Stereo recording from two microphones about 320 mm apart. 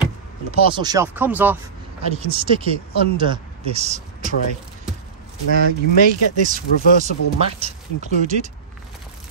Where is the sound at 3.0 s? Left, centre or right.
Centre.